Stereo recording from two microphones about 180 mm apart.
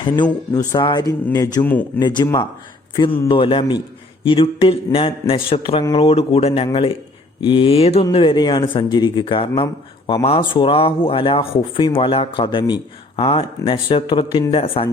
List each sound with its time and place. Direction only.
0.0 s speech: 25° left (ahead or behind)
1.6 s speech: 10° left (ahead or behind)
2.0 s speech: 25° left (ahead or behind)